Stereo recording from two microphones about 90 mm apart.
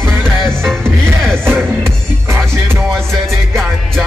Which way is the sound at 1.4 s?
25° right (ahead or behind).